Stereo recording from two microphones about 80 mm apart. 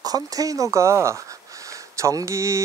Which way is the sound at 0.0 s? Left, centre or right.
Right.